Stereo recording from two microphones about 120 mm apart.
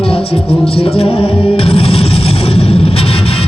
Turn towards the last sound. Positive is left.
turn(degrees=55)  # may be behind; listen again after turning